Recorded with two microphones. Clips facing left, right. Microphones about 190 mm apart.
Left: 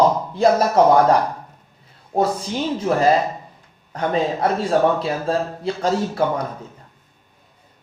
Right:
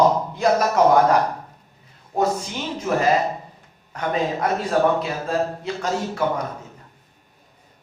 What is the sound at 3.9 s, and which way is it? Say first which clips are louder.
A man's voice: left 3 dB; 30° left (ahead or behind).